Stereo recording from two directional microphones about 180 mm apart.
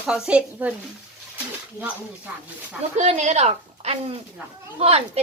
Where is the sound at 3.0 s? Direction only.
40° right (ahead or behind).